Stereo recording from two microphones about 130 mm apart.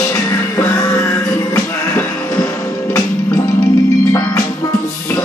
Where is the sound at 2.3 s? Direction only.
25° left (ahead or behind).